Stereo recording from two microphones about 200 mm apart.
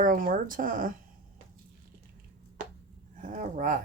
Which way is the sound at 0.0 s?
45° right (ahead or behind).